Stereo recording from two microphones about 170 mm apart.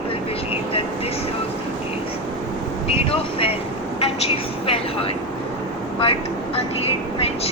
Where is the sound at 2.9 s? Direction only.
35° left (ahead or behind).